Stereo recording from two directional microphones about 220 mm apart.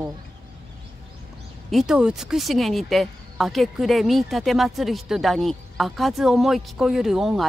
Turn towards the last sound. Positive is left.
turn(degrees=0)  # may be behind; listen again after turning